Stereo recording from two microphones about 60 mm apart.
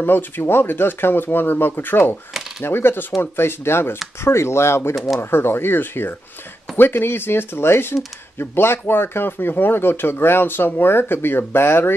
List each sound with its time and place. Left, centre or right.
0.0 s speech: left
4.9 s speech: centre
5.2 s speech: left